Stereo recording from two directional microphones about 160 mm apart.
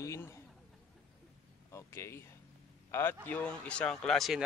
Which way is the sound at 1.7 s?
15° left (ahead or behind).